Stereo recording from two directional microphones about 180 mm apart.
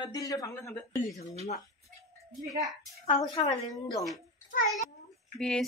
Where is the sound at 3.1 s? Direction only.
35° left (ahead or behind).